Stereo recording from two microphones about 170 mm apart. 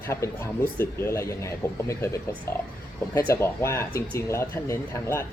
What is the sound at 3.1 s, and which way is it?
Speech, 15° left (ahead or behind).